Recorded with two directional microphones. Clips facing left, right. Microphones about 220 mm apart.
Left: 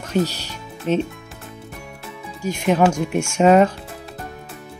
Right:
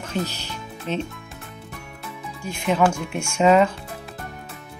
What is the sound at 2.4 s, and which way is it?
Speech, 40° left (ahead or behind).